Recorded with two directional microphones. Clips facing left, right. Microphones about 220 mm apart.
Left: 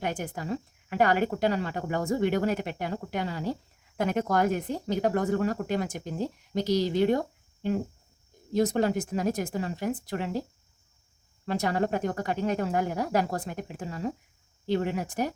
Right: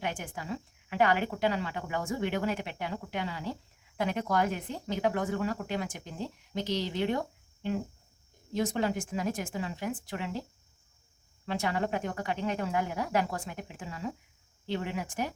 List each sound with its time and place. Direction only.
0.0 s speech: 40° left (ahead or behind)
11.4 s speech: 40° left (ahead or behind)